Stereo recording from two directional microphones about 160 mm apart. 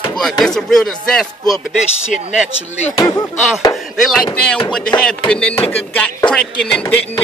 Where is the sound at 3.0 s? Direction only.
20° left (ahead or behind).